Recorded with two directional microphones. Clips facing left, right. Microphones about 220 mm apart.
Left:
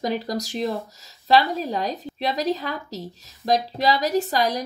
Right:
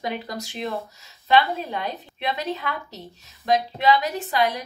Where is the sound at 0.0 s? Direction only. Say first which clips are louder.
Left 5 dB; 40° left (ahead or behind).